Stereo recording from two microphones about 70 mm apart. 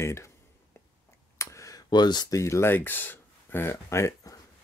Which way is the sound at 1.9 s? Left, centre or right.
Left.